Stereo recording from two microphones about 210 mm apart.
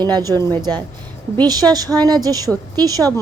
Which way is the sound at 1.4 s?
20° right (ahead or behind).